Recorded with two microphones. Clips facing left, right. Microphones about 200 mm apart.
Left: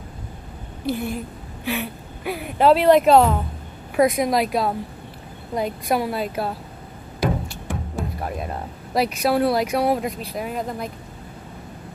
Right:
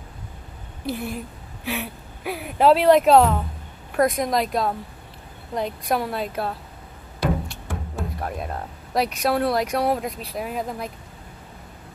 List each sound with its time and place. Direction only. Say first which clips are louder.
0.8 s a woman's voice: left 3 dB; centre (ahead or behind)
7.2 s music: left 1 dB; 15° left (ahead or behind)
8.2 s speech: left 1 dB; centre (ahead or behind)